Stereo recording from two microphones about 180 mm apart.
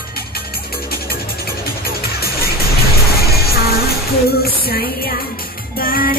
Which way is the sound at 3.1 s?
60° left (ahead or behind).